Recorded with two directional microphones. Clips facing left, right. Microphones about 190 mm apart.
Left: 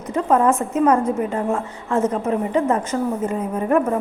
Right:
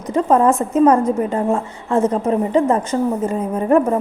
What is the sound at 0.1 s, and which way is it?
A woman's voice, 30° right (ahead or behind).